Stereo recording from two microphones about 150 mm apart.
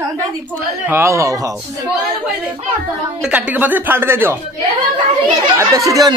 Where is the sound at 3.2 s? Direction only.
10° right (ahead or behind).